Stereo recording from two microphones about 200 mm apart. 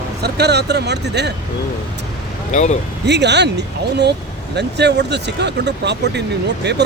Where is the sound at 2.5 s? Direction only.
35° left (ahead or behind).